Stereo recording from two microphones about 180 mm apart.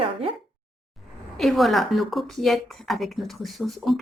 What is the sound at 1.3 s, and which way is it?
Speech, centre (ahead or behind).